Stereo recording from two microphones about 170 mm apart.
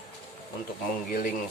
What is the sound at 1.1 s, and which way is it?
Speech, 55° left (ahead or behind).